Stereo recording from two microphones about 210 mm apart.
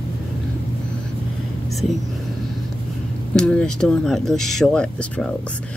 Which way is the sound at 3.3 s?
5° left (ahead or behind).